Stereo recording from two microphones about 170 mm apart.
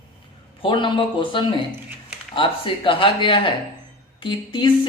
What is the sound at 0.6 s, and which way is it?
Speech, 30° left (ahead or behind).